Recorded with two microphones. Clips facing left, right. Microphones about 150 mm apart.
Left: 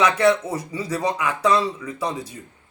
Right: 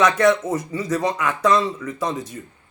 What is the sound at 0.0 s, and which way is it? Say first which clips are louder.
Speech: right 1 dB; 10° left (ahead or behind).